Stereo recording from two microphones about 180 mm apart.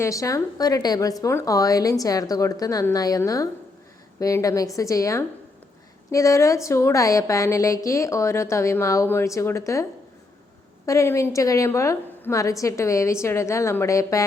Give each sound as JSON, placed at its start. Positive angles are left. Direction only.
{"t": 0.0, "sound": "a woman's voice", "side_deg": 15}
{"t": 10.8, "sound": "a woman's voice", "side_deg": 15}